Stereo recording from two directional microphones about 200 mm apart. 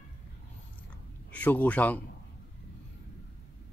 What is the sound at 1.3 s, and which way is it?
Speech, 10° left (ahead or behind).